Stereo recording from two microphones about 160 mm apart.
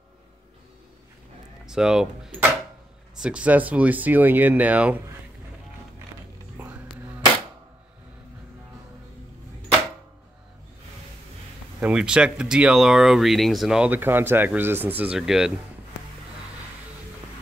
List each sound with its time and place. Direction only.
1.7 s speech: 5° right (ahead or behind)
6.6 s a sound: 10° right (ahead or behind)
11.8 s speech: 5° right (ahead or behind)